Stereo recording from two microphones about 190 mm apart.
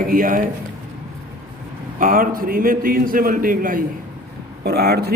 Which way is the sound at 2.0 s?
50° right (ahead or behind).